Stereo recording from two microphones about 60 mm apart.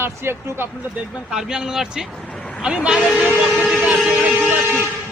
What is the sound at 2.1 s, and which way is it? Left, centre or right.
Vehicle, centre.